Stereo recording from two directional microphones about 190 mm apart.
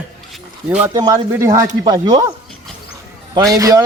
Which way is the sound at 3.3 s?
20° right (ahead or behind).